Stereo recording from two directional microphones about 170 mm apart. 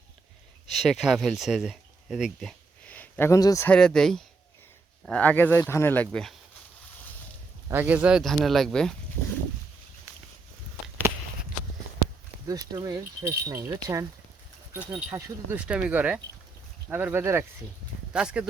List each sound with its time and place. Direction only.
0.7 s speech: centre (ahead or behind); by 3.7 s 20° left (ahead or behind)
3.7 s speech: 5° left (ahead or behind)
7.7 s speech: 10° right (ahead or behind)
12.5 s speech: 20° right (ahead or behind); by 18.4 s 5° right (ahead or behind)